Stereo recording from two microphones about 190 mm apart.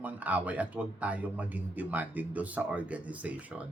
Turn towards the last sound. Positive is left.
turn(degrees=-5)  # may be behind; listen again after turning